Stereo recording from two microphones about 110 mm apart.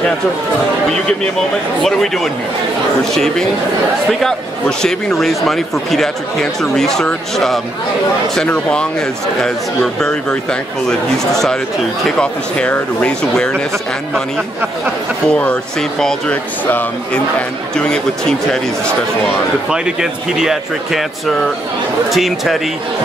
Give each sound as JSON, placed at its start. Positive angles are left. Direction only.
{"t": 1.8, "sound": "speech", "side_deg": 5}
{"t": 4.1, "sound": "speech", "side_deg": 5}
{"t": 9.9, "sound": "speech", "side_deg": 5}
{"t": 15.2, "sound": "speech", "side_deg": 10}
{"t": 17.7, "sound": "speech", "side_deg": 5}
{"t": 19.7, "sound": "speech", "side_deg": -5}
{"t": 22.1, "sound": "speech", "side_deg": 0}